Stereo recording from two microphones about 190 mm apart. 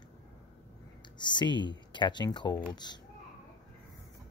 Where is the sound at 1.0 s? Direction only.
25° left (ahead or behind).